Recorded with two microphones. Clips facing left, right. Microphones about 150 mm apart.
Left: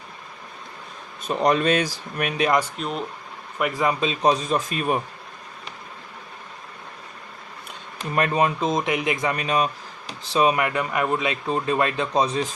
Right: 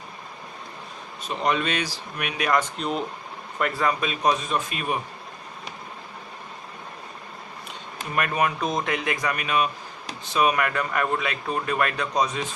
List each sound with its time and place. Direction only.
1.3 s a man's voice: 40° left (ahead or behind)
2.6 s speech: centre (ahead or behind)
3.6 s a man's voice: 15° left (ahead or behind); by 4.9 s 40° left (ahead or behind)
8.1 s speech: 30° left (ahead or behind)